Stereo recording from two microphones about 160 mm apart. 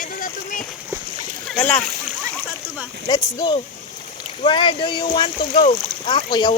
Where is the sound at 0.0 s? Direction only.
55° left (ahead or behind).